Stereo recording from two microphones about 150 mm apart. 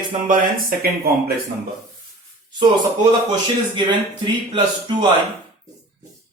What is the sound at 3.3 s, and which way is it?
A man's voice, 30° right (ahead or behind).